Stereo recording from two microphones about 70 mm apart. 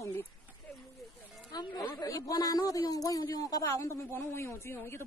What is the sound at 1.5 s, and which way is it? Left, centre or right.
Speech, left.